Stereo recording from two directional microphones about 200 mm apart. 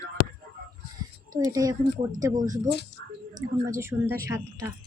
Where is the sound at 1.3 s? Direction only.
15° right (ahead or behind).